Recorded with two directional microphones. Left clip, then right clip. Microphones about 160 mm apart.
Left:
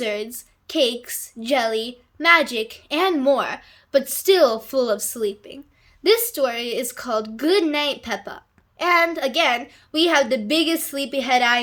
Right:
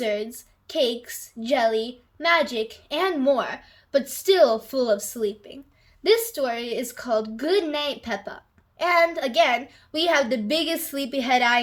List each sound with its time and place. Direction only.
0.0 s a woman's voice: 35° left (ahead or behind)